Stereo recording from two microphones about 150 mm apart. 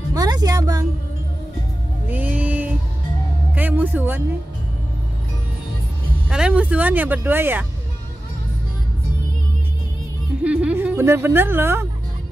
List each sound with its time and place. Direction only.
0.1 s music: 25° right (ahead or behind)
2.0 s music: 10° right (ahead or behind)
6.2 s speech: 5° right (ahead or behind)
10.4 s speech: 10° right (ahead or behind)